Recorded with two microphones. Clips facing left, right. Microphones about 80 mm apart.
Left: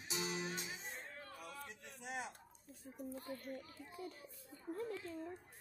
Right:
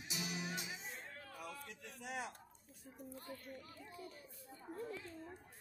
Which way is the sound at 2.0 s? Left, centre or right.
Centre.